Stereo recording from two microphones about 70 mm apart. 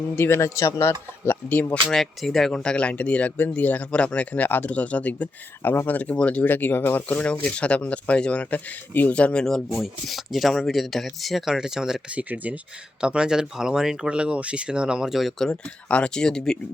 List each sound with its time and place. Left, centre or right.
0.2 s speech: left
1.2 s speech: left
1.9 s speech: centre
12.1 s speech: right; by 15.5 s centre
15.9 s speech: centre